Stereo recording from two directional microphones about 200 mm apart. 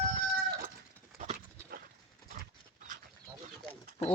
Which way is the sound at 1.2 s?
35° right (ahead or behind).